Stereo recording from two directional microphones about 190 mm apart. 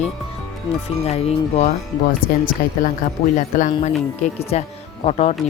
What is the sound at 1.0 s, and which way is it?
Speech, 30° left (ahead or behind).